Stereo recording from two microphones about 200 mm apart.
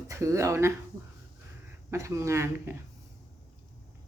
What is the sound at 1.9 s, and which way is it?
Speech, 15° right (ahead or behind).